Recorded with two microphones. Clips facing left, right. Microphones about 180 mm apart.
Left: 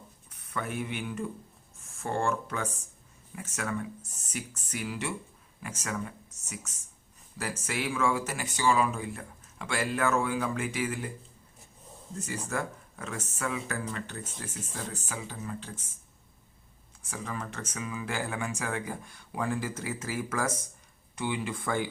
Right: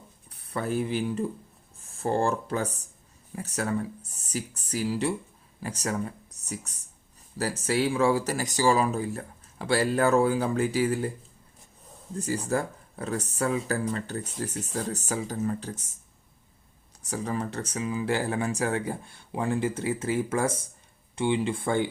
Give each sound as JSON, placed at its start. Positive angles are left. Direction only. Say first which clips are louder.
{"t": 0.3, "sound": "speech", "louder": "right 6 dB", "side_deg": -35}
{"t": 12.1, "sound": "speech", "louder": "right 6 dB", "side_deg": -35}
{"t": 17.0, "sound": "speech", "louder": "right 7 dB", "side_deg": -35}